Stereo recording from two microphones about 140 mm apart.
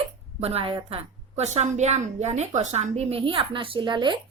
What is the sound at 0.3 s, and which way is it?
A woman's voice, 45° right (ahead or behind).